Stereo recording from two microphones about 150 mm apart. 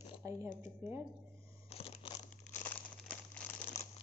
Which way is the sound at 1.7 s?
40° left (ahead or behind).